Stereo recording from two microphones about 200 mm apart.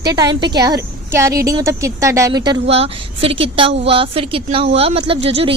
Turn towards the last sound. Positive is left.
turn(degrees=-30)  # may be behind; listen again after turning